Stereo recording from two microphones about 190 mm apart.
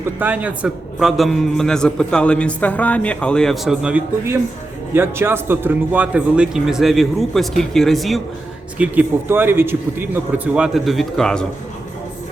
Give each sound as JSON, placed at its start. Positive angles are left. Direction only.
{"t": 0.2, "sound": "a man's voice", "side_deg": -10}
{"t": 8.8, "sound": "a man's voice", "side_deg": -10}